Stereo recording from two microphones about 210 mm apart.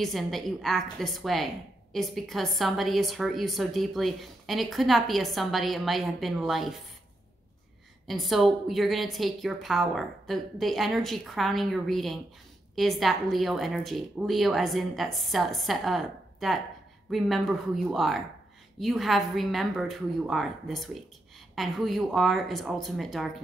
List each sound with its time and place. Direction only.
0.0 s a woman's voice: centre (ahead or behind)
8.1 s a woman's voice: centre (ahead or behind)